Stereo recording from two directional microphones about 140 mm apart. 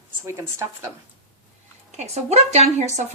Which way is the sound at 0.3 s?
20° right (ahead or behind).